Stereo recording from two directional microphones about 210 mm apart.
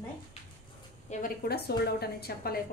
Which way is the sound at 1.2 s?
50° left (ahead or behind).